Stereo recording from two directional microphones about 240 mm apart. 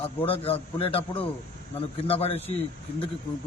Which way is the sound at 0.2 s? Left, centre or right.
Left.